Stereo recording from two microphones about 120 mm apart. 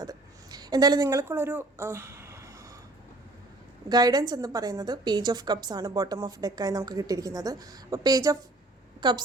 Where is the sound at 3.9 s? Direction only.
35° right (ahead or behind).